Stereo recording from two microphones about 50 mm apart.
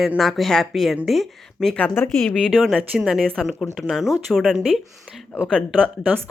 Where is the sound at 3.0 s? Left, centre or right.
Centre.